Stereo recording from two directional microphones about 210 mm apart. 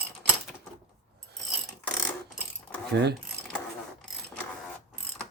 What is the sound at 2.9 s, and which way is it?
Speech, 50° right (ahead or behind).